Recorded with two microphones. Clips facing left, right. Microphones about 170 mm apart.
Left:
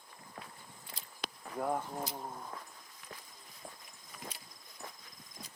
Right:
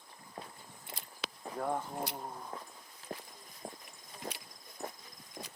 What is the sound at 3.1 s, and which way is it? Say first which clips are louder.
Walk: right 8 dB; 35° right (ahead or behind).